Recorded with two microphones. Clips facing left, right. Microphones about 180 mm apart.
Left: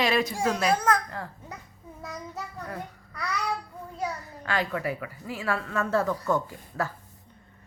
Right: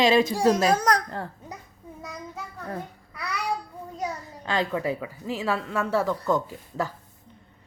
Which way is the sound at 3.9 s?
20° right (ahead or behind).